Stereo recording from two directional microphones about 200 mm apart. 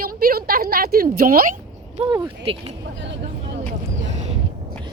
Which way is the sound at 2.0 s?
30° right (ahead or behind).